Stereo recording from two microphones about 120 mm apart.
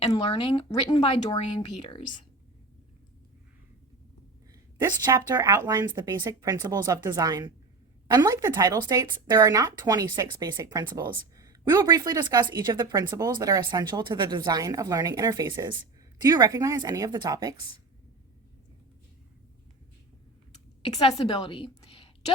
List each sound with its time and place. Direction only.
0.3 s speech: 45° left (ahead or behind)
0.7 s speech: 35° left (ahead or behind)
5.0 s a woman's voice: 30° right (ahead or behind)
21.2 s a woman's voice: 45° left (ahead or behind)